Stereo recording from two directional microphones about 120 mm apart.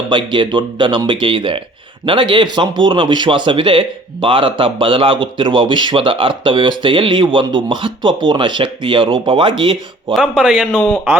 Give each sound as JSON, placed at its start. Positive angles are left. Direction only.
{"t": 0.1, "sound": "a man's voice", "side_deg": -45}
{"t": 10.2, "sound": "speech", "side_deg": -10}
{"t": 10.8, "sound": "a man's voice", "side_deg": 10}